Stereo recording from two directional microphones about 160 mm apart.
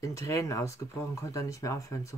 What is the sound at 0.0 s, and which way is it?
Speech, 20° left (ahead or behind).